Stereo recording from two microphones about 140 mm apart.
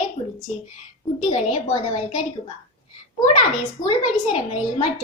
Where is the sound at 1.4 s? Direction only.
50° left (ahead or behind).